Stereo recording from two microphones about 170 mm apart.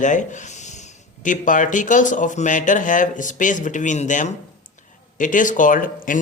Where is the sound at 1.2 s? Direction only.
50° left (ahead or behind).